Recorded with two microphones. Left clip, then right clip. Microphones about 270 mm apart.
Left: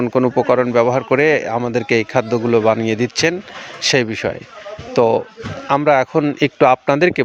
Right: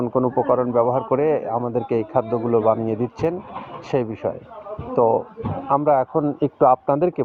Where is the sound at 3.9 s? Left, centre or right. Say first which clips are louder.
Left 1 dB; left.